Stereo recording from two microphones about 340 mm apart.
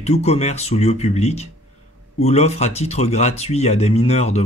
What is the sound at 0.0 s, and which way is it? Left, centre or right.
Speech, centre.